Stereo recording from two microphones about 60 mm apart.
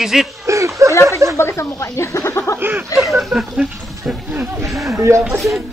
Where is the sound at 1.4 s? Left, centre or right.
Left.